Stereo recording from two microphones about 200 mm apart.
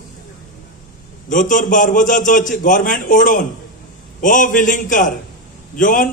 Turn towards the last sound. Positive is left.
turn(degrees=40)  # may be behind; listen again after turning